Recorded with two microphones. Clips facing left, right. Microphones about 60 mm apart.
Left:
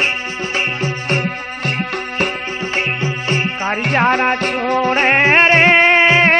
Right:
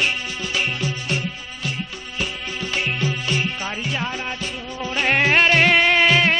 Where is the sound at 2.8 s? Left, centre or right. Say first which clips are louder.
Left 2 dB; left.